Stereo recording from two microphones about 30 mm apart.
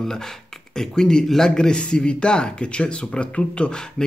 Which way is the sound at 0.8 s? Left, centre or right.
Left.